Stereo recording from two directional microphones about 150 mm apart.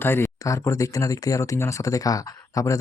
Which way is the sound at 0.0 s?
15° left (ahead or behind).